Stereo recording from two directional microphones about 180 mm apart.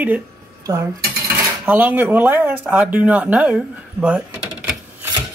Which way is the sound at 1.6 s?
10° right (ahead or behind).